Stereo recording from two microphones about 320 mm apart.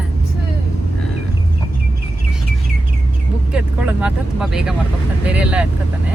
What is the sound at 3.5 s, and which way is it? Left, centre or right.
Speech, centre.